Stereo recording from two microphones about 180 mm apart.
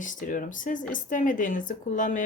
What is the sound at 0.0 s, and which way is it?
Speech, 45° left (ahead or behind).